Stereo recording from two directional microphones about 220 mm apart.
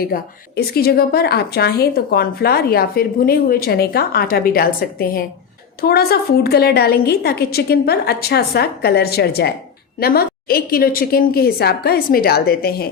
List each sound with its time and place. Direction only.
0.0 s a woman's voice: 45° left (ahead or behind)